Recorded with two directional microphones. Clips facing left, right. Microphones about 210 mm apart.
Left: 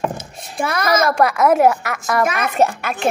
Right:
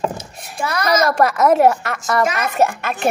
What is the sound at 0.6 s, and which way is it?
Speech, 55° left (ahead or behind).